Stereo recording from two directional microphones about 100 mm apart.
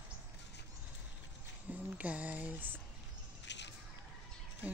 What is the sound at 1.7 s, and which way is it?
Speech, 15° right (ahead or behind).